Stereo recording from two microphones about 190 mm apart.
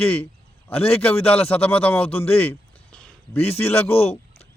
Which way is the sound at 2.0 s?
30° left (ahead or behind).